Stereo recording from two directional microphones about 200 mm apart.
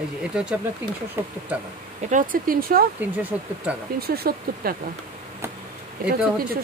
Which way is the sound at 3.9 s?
50° right (ahead or behind).